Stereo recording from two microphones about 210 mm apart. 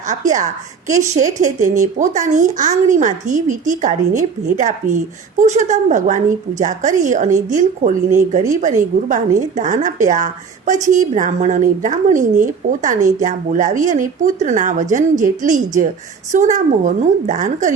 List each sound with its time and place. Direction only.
0.0 s a woman's voice: 35° right (ahead or behind)